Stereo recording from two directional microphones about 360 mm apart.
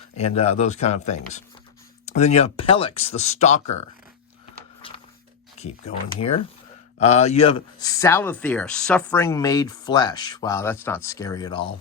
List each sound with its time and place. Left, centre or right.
0.2 s speech: centre
4.8 s a sound: centre
5.5 s speech: centre